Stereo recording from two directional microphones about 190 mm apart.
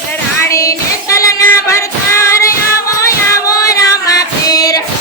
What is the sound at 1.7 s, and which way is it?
Music, 15° left (ahead or behind).